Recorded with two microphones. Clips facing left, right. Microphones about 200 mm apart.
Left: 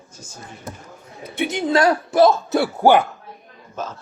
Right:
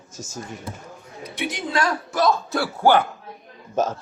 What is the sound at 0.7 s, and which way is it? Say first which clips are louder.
Speech: even; 45° left (ahead or behind).